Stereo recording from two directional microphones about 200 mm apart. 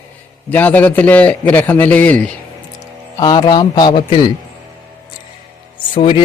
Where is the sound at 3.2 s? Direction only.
20° left (ahead or behind).